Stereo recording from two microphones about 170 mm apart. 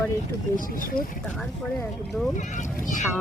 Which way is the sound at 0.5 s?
55° left (ahead or behind).